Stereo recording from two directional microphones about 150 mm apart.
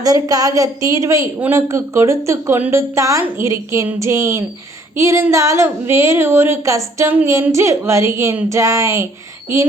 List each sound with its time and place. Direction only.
0.0 s a woman's voice: 25° right (ahead or behind)